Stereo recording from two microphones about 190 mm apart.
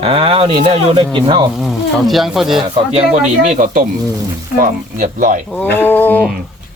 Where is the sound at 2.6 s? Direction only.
30° right (ahead or behind).